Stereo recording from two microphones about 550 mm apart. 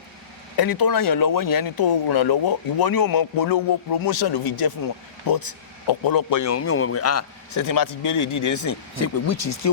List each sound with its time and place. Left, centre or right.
0.5 s speech: left